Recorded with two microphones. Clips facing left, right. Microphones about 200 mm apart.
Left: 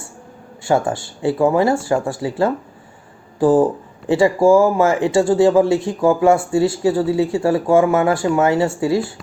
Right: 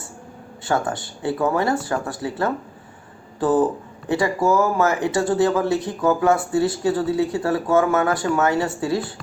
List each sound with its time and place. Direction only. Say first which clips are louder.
0.7 s speech: left 5 dB; 20° left (ahead or behind)